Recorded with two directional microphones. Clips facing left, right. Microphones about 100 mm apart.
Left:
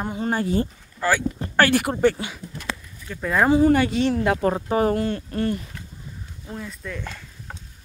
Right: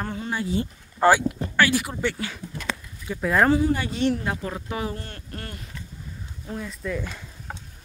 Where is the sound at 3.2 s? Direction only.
Centre (ahead or behind).